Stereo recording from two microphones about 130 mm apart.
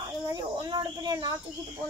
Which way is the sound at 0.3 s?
35° right (ahead or behind).